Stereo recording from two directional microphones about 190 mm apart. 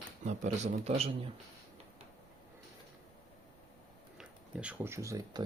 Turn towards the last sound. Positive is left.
turn(degrees=-15)  # may be behind; listen again after turning